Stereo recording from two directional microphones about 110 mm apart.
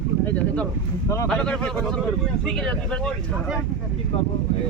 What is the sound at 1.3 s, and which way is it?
Speech, 10° left (ahead or behind).